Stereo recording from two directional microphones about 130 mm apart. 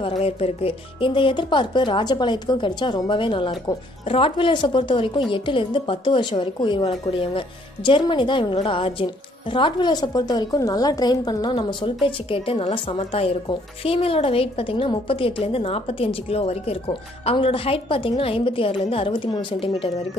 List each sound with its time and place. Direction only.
0.0 s a woman's voice: 45° left (ahead or behind)